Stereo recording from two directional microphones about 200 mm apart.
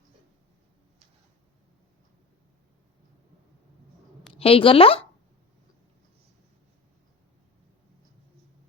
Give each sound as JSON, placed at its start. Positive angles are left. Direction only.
{"t": 4.3, "sound": "a woman's voice", "side_deg": 30}